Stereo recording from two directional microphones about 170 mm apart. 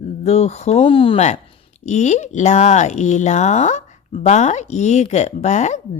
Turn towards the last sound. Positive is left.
turn(degrees=45)  # may be behind; listen again after turning